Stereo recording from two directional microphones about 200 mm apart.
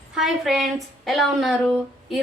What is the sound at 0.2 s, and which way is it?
A woman's voice, centre (ahead or behind).